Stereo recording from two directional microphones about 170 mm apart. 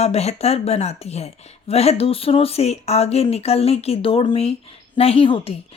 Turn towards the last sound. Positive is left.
turn(degrees=35)  # may be behind; listen again after turning